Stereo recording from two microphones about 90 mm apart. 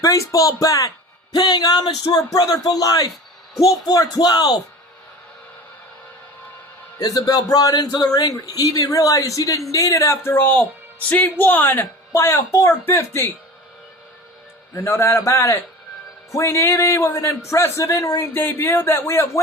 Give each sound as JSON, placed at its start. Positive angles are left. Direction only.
{"t": 0.0, "sound": "speech", "side_deg": 35}
{"t": 1.4, "sound": "speech", "side_deg": 50}
{"t": 7.0, "sound": "a woman's voice", "side_deg": 40}
{"t": 14.7, "sound": "a woman's voice", "side_deg": 30}